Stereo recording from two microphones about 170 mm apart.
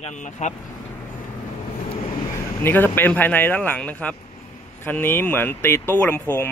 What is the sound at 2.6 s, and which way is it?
Speech, 15° left (ahead or behind).